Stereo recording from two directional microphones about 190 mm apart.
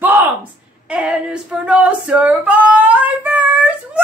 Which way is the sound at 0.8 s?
5° right (ahead or behind).